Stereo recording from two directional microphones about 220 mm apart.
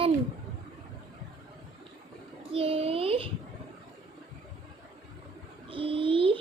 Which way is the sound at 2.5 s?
25° right (ahead or behind).